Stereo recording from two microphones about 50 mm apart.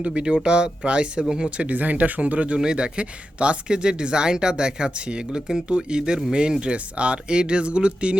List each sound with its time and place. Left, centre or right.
0.0 s speech: right
2.6 s speech: centre